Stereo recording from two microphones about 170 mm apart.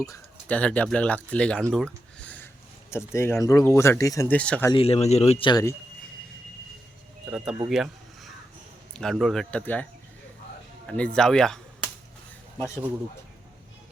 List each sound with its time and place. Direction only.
0.0 s bird: 20° left (ahead or behind)
0.5 s speech: 10° left (ahead or behind)
1.7 s a sound: 5° left (ahead or behind)
2.9 s speech: 15° left (ahead or behind)
4.7 s a man's voice: 35° left (ahead or behind)
5.5 s speech: 20° left (ahead or behind)
7.3 s speech: 5° right (ahead or behind)
7.7 s a sound: centre (ahead or behind)
8.9 s speech: centre (ahead or behind)
10.8 s speech: 5° left (ahead or behind)